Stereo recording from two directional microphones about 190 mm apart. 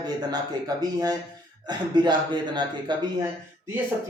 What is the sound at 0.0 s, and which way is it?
A man's voice, 20° right (ahead or behind).